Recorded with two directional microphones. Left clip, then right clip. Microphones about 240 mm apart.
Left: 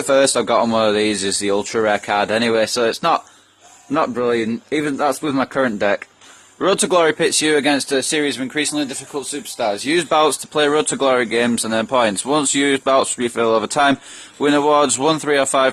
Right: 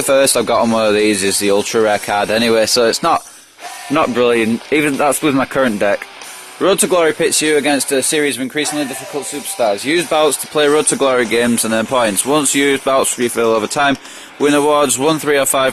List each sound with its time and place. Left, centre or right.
0.1 s speech: centre